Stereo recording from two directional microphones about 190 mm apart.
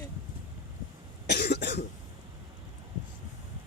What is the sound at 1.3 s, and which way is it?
Cough, 60° left (ahead or behind).